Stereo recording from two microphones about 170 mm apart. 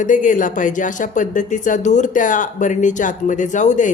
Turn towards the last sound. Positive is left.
turn(degrees=45)  # may be behind; listen again after turning